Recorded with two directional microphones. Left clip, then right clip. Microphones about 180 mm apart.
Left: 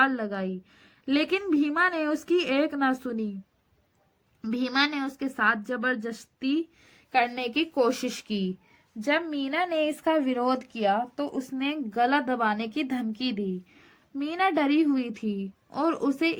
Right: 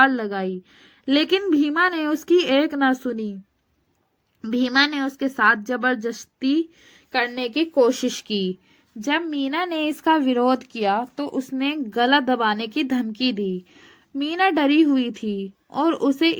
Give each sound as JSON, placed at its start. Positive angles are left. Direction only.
{"t": 0.0, "sound": "speech", "side_deg": -20}
{"t": 4.4, "sound": "speech", "side_deg": -20}